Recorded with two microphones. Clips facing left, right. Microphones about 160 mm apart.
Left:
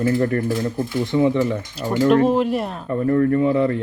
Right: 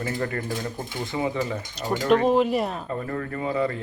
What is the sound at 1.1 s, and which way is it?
Speech, 65° left (ahead or behind).